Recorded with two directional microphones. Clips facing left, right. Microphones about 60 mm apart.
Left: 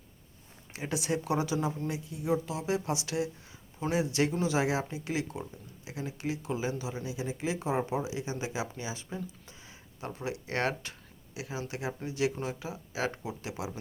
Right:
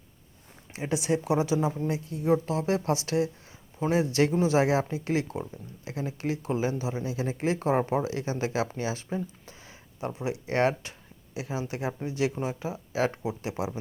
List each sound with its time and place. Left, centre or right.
0.7 s speech: right
2.0 s speech: right
9.0 s a sound: right
10.1 s speech: right